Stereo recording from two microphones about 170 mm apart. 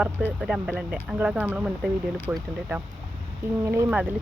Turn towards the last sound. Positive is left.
turn(degrees=-10)  # may be behind; listen again after turning